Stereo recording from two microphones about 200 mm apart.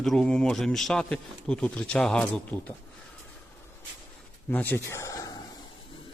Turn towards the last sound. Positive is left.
turn(degrees=20)  # may be behind; listen again after turning